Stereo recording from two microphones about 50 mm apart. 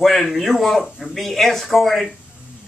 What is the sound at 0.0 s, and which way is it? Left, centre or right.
Speech, centre.